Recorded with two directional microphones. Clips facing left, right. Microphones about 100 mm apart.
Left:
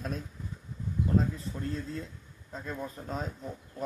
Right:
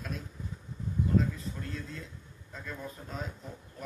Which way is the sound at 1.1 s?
30° left (ahead or behind).